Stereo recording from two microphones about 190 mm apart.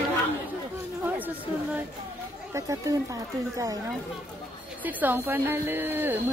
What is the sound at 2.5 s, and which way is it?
Speech, 15° right (ahead or behind).